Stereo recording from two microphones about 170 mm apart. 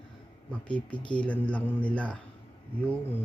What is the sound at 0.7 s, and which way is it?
Speech, 10° left (ahead or behind).